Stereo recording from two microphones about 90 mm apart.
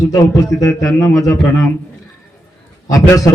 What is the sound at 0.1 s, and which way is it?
A man's voice, 40° left (ahead or behind).